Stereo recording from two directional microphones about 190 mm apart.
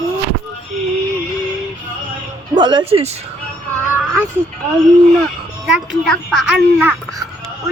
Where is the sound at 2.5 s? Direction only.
25° right (ahead or behind).